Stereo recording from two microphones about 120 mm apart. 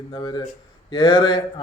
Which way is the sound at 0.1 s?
40° left (ahead or behind).